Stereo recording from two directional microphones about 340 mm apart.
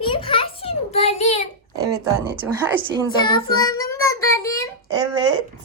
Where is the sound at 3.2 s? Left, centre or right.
Centre.